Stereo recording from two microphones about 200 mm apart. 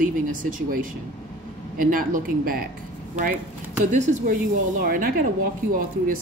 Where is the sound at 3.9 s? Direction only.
40° right (ahead or behind).